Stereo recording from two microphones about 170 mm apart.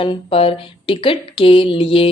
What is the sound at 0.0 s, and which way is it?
Speech, 30° left (ahead or behind).